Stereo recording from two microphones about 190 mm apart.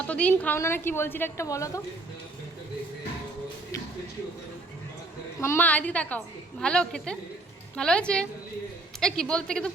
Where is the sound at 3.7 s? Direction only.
15° left (ahead or behind).